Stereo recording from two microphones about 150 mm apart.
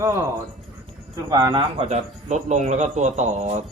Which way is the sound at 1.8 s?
50° right (ahead or behind).